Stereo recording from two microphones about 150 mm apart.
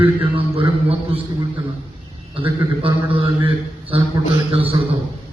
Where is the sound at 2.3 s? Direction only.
35° right (ahead or behind).